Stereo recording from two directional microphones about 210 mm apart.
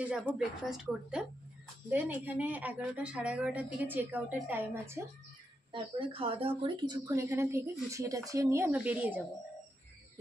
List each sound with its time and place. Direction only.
0.0 s a woman's voice: 5° right (ahead or behind)
5.7 s a woman's voice: 25° right (ahead or behind); by 9.2 s 5° right (ahead or behind)